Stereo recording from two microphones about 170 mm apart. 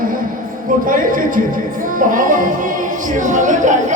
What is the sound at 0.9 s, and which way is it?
Speech, 55° right (ahead or behind).